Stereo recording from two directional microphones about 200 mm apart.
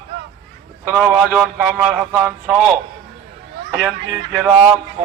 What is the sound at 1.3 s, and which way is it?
A man's voice, 5° right (ahead or behind).